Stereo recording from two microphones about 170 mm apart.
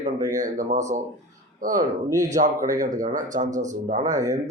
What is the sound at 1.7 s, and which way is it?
Speech, 20° right (ahead or behind).